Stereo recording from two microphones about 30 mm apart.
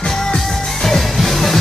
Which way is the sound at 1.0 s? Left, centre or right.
Centre.